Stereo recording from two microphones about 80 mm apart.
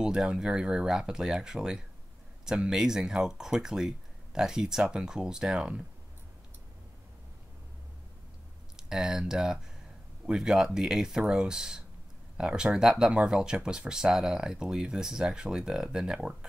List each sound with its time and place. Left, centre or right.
0.0 s speech: centre
8.7 s speech: centre